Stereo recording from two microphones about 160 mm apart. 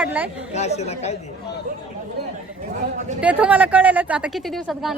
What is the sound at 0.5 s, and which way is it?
Speech, 45° left (ahead or behind).